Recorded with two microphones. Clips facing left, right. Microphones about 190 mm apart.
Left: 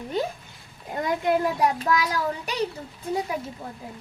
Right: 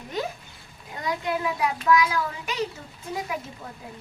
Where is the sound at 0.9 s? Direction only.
50° left (ahead or behind).